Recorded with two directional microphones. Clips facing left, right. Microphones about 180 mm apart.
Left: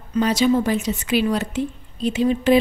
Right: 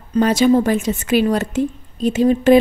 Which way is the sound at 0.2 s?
50° right (ahead or behind).